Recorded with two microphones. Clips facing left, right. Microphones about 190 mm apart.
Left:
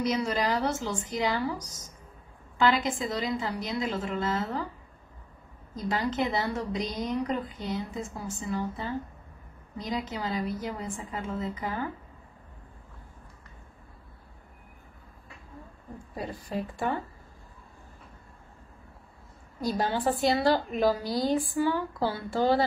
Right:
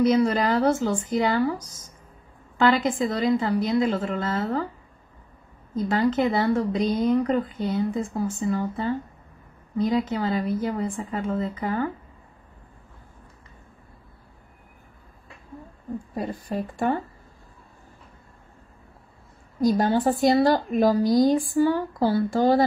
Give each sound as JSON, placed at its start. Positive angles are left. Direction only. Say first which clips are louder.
{"t": 0.0, "sound": "a woman's voice", "louder": "right 8 dB", "side_deg": -55}
{"t": 5.9, "sound": "a woman's voice", "louder": "right 6 dB", "side_deg": -55}
{"t": 16.2, "sound": "a woman's voice", "louder": "right 3 dB", "side_deg": -50}
{"t": 19.8, "sound": "a woman's voice", "louder": "right 2 dB", "side_deg": -45}